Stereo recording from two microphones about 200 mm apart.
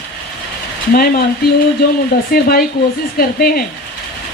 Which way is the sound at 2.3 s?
50° left (ahead or behind).